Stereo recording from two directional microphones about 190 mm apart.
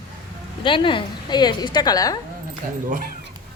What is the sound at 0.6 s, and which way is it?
A woman's voice, 25° left (ahead or behind).